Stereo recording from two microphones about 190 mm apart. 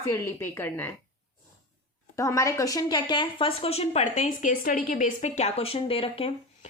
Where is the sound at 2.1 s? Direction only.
15° left (ahead or behind).